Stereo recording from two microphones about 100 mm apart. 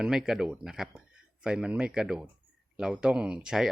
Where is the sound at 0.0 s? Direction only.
5° right (ahead or behind).